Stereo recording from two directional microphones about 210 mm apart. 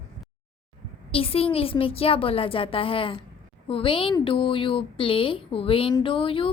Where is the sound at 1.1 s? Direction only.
25° left (ahead or behind).